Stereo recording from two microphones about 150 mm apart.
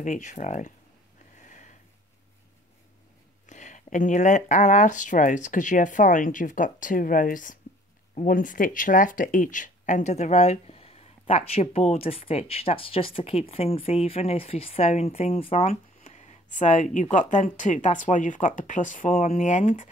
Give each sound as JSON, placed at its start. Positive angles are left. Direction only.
{"t": 0.0, "sound": "speech", "side_deg": 55}
{"t": 1.4, "sound": "a sound", "side_deg": 55}
{"t": 3.4, "sound": "speech", "side_deg": 55}